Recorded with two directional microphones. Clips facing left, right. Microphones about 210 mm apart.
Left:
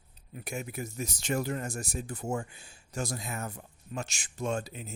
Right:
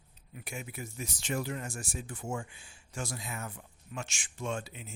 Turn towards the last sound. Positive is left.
turn(degrees=40)  # may be behind; listen again after turning